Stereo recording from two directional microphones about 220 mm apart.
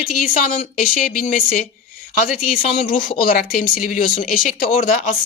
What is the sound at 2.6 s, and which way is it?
Speech, 35° left (ahead or behind).